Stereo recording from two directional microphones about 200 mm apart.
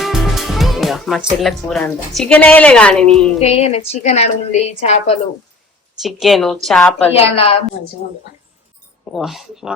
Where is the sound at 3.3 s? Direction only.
30° left (ahead or behind).